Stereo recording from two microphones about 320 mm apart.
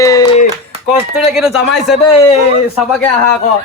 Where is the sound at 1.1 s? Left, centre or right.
Centre.